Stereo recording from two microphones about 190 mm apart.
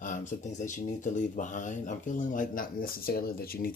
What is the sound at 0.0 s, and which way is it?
Speech, 40° left (ahead or behind).